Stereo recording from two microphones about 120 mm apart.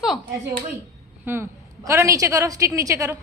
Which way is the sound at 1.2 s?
20° right (ahead or behind).